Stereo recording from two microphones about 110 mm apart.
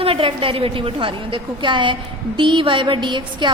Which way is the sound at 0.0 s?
55° right (ahead or behind).